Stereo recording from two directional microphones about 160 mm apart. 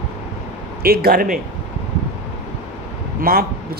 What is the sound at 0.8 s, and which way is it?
Speech, 70° right (ahead or behind).